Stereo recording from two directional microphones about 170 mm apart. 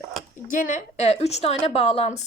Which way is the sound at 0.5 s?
50° left (ahead or behind).